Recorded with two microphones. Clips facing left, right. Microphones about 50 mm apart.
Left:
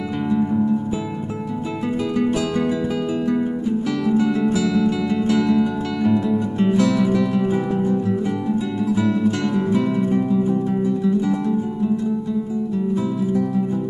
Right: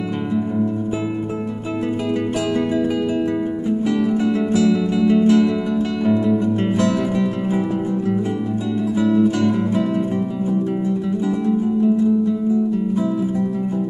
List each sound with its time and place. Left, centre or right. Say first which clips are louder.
2.5 s music: right 1 dB; right
4.6 s music: right 3 dB; centre
8.9 s music: right 4 dB; centre